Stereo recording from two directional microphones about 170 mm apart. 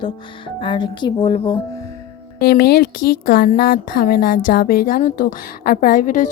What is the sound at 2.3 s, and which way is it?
Speech, 65° left (ahead or behind).